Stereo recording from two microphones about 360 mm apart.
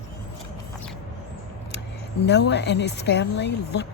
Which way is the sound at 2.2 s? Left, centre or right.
Left.